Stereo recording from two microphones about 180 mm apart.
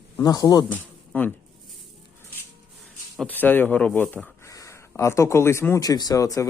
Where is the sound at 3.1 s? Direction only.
10° left (ahead or behind).